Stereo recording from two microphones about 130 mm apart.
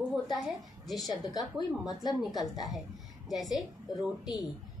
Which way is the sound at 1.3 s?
Centre (ahead or behind).